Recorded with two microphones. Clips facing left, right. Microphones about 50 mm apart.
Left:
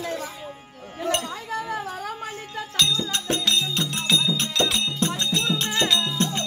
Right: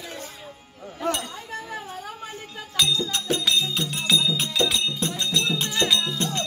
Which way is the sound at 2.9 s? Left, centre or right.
Left.